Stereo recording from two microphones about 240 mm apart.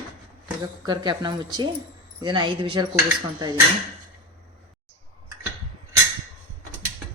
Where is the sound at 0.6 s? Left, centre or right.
Centre.